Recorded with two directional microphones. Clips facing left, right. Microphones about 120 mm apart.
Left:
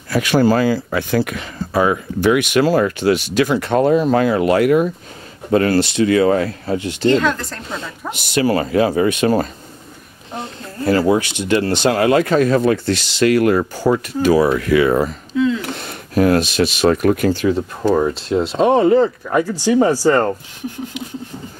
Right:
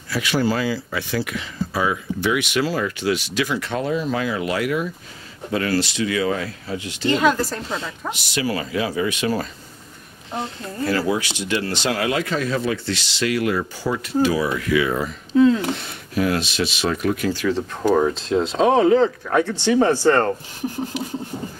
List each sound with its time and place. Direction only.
0.1 s speech: 50° left (ahead or behind)
7.1 s speech: 10° right (ahead or behind)
8.1 s speech: 55° left (ahead or behind)
10.9 s speech: 40° left (ahead or behind)
11.1 s speech: 55° left (ahead or behind)
15.3 s a sound: 40° right (ahead or behind)
15.8 s speech: 50° left (ahead or behind)
17.4 s speech: 15° left (ahead or behind)
17.9 s speech: 5° left (ahead or behind)
20.6 s a sound: 40° right (ahead or behind)